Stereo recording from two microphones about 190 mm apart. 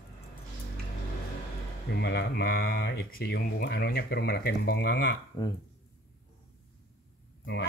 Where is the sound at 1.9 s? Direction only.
60° left (ahead or behind).